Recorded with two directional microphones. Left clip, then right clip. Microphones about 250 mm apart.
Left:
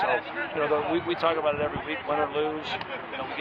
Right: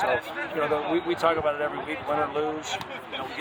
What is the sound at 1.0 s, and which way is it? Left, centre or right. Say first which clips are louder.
A man's voice: right 1 dB; centre.